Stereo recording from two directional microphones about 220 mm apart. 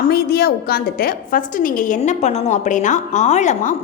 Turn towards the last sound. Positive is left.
turn(degrees=30)  # may be behind; listen again after turning